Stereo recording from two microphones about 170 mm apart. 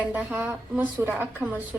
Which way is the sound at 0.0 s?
10° right (ahead or behind).